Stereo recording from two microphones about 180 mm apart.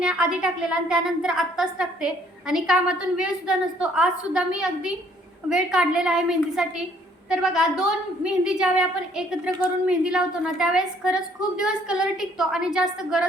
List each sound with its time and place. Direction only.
0.0 s a woman's voice: 5° right (ahead or behind)